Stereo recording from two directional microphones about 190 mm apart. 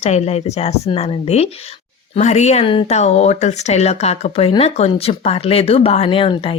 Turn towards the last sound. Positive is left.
turn(degrees=30)  # may be behind; listen again after turning